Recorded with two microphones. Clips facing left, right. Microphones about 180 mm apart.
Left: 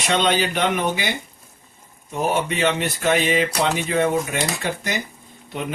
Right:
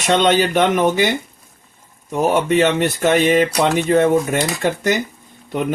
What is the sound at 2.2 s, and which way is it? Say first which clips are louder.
Speech: right 6 dB; 45° right (ahead or behind).